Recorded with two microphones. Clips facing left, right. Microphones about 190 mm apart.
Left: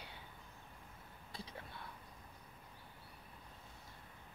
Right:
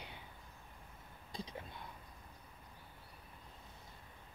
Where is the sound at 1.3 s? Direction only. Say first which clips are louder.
Right 4 dB; 15° right (ahead or behind).